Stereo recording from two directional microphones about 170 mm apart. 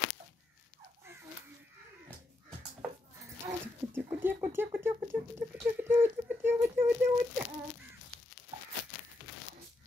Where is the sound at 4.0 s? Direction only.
10° right (ahead or behind).